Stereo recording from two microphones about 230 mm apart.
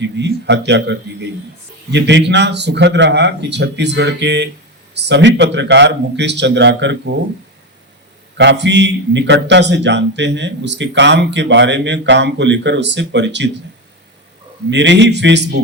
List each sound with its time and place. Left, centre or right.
0.0 s a man's voice: right
8.4 s a man's voice: right
14.7 s a man's voice: right